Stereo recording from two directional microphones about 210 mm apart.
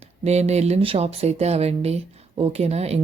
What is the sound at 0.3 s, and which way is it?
A woman's voice, 30° right (ahead or behind).